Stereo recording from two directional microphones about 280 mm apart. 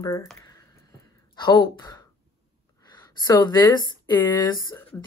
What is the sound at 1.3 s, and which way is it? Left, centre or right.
A woman's voice, centre.